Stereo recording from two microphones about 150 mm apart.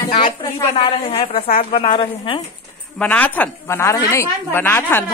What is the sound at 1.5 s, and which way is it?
Speech, 70° left (ahead or behind).